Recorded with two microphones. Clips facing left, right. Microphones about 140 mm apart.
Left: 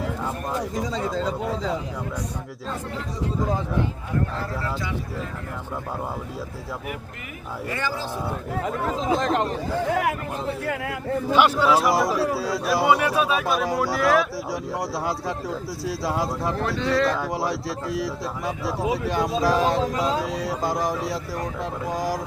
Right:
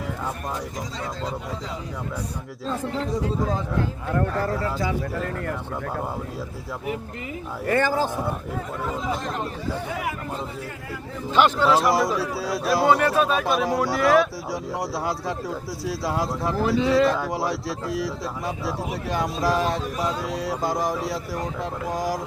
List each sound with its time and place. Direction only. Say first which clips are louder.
4.1 s speech: right 7 dB; 55° right (ahead or behind)
7.7 s a man's voice: right 8 dB; 50° right (ahead or behind)
8.6 s speech: left 5 dB; 90° left; by 11.2 s 70° left (ahead or behind)
11.3 s speech: even; 10° left (ahead or behind)